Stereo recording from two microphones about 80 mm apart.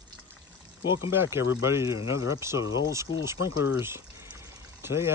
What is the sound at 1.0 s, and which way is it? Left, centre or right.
Speech, right.